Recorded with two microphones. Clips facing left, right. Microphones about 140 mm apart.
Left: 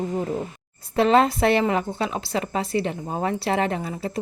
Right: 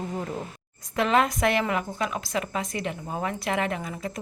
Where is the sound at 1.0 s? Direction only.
30° left (ahead or behind).